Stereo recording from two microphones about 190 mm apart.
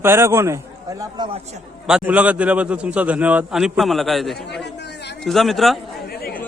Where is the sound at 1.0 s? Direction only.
25° right (ahead or behind).